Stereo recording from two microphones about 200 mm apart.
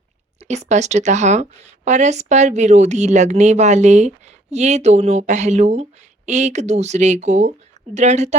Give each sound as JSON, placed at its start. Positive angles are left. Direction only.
{"t": 0.3, "sound": "a woman's voice", "side_deg": -35}